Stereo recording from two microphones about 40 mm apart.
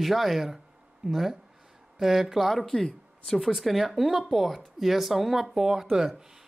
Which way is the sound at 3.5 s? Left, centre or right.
Centre.